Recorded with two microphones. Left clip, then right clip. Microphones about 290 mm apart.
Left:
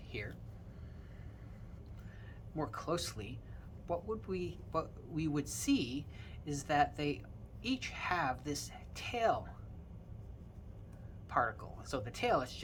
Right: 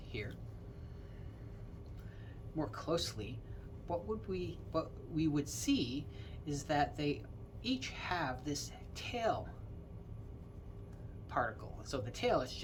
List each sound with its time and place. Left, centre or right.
0.1 s a sound: centre
2.6 s a man's voice: centre
11.3 s a man's voice: centre